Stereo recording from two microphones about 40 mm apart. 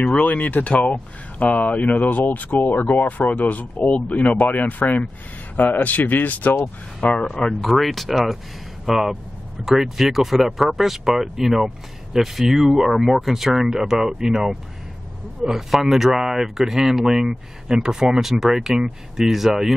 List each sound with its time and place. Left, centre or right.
0.0 s speech: left
7.0 s speech: left
7.6 s speech: centre